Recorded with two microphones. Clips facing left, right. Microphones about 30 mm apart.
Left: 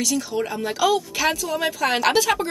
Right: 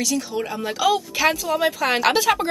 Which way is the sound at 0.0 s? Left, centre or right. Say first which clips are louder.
Even; centre.